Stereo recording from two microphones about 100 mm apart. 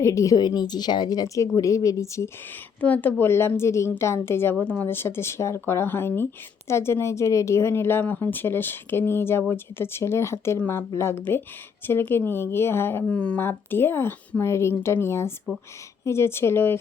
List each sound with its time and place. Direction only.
0.0 s a woman's voice: 30° left (ahead or behind)
2.8 s speech: 15° left (ahead or behind)
13.1 s speech: 15° left (ahead or behind)